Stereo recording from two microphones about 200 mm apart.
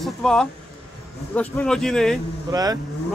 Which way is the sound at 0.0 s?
Centre (ahead or behind).